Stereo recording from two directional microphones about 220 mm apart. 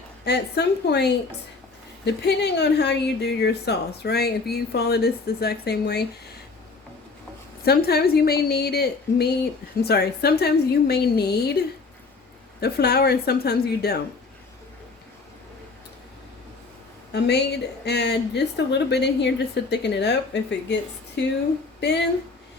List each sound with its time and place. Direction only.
0.3 s a woman's voice: 50° left (ahead or behind)
7.6 s a woman's voice: 45° left (ahead or behind)
12.5 s a woman's voice: 45° left (ahead or behind)
17.1 s a woman's voice: 50° left (ahead or behind)
21.8 s a sound: 50° left (ahead or behind)